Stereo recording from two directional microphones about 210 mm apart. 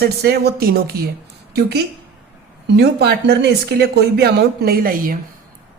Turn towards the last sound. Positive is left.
turn(degrees=-40)  # may be behind; listen again after turning